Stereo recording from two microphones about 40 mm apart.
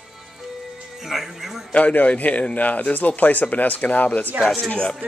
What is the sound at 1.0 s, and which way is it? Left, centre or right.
Music, centre.